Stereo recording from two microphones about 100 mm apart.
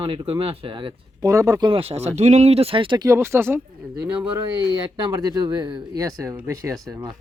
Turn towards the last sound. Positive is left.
turn(degrees=-30)  # may be behind; listen again after turning